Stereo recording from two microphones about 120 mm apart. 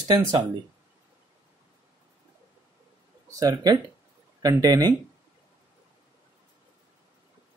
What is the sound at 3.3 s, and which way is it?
Speech, 30° right (ahead or behind).